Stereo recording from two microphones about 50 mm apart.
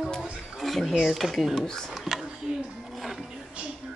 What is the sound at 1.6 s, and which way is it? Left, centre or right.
Speech, centre.